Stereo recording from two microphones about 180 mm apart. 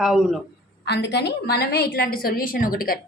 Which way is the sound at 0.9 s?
70° left (ahead or behind).